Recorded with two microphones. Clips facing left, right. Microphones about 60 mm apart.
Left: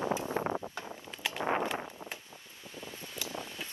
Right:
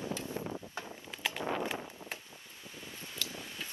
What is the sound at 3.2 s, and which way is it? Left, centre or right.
Mechanical fan, centre.